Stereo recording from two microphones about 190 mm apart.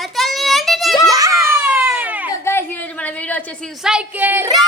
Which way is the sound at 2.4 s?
10° left (ahead or behind).